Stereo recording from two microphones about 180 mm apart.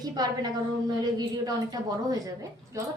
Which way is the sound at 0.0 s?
20° right (ahead or behind).